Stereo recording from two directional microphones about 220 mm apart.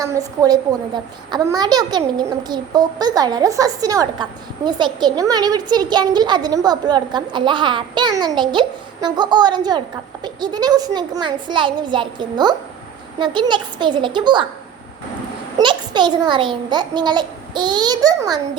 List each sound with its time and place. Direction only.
0.0 s a woman's voice: 15° right (ahead or behind)
15.5 s a child's voice: 20° right (ahead or behind)